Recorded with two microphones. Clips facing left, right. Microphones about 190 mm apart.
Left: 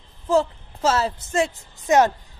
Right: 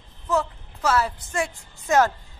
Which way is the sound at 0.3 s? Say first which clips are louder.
Left 5 dB; 30° left (ahead or behind).